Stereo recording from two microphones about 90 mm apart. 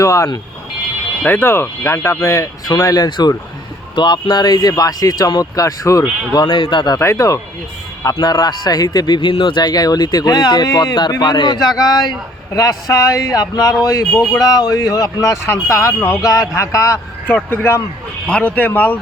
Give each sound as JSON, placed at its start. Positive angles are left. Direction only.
{"t": 0.0, "sound": "speech", "side_deg": 40}
{"t": 1.2, "sound": "speech", "side_deg": 25}
{"t": 6.4, "sound": "speech", "side_deg": 55}
{"t": 7.0, "sound": "speech", "side_deg": 35}
{"t": 9.3, "sound": "speech", "side_deg": 70}
{"t": 16.6, "sound": "speech", "side_deg": 35}
{"t": 18.3, "sound": "speech", "side_deg": 15}